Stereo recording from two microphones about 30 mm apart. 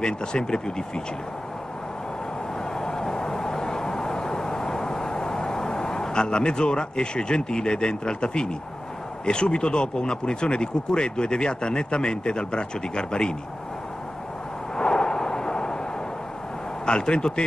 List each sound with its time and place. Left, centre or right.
0.0 s speech: left
2.7 s vehicle: left
9.2 s speech: left
14.8 s a sound: left
16.8 s speech: left